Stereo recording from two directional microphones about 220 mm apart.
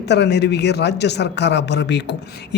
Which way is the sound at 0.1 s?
50° left (ahead or behind).